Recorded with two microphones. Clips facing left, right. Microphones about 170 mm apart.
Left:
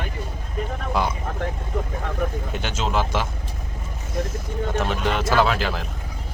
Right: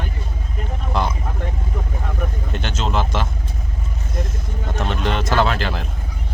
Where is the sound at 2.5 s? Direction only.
10° left (ahead or behind).